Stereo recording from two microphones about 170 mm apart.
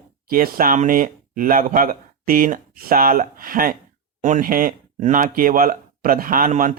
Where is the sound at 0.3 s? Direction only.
55° right (ahead or behind).